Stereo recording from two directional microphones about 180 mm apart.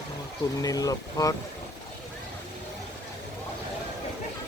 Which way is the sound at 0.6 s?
20° left (ahead or behind).